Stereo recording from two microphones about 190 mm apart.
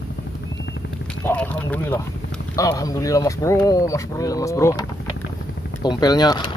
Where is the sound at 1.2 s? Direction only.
10° left (ahead or behind).